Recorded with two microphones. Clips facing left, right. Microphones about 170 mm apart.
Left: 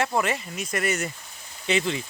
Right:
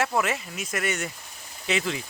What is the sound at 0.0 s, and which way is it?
Speech, centre (ahead or behind).